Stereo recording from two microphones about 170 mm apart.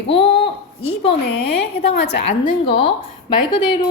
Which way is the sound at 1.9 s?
80° left.